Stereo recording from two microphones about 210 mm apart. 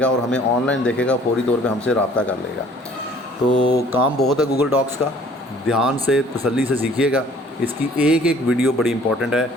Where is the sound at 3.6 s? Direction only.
50° left (ahead or behind).